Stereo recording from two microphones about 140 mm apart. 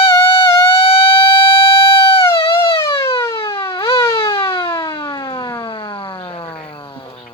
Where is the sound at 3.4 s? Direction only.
40° left (ahead or behind).